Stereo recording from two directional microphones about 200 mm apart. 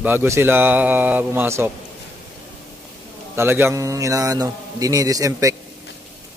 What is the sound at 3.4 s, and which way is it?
A man's voice, 10° right (ahead or behind).